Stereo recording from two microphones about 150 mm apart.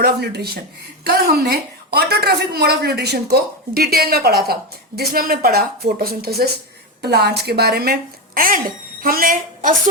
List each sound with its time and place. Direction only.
0.0 s a woman's voice: 90° right
8.4 s a woman's voice: 70° right (ahead or behind)